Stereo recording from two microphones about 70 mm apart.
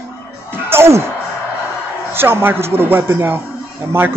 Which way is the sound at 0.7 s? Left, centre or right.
Right.